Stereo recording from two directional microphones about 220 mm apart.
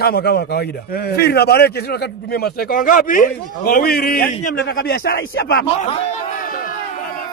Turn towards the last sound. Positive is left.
turn(degrees=45)  # may be behind; listen again after turning